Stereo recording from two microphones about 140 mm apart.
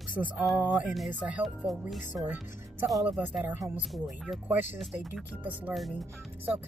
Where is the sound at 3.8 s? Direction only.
Centre (ahead or behind).